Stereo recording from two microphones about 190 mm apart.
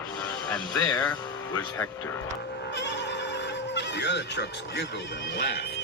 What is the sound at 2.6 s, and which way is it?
Music, 65° left (ahead or behind).